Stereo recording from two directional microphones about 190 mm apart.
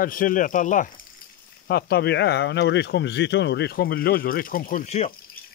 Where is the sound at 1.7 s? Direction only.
55° left (ahead or behind).